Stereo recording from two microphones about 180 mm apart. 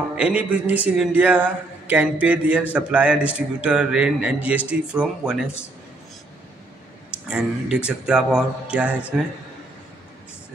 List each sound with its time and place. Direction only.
0.2 s a man's voice: 5° right (ahead or behind)
7.2 s speech: 5° right (ahead or behind)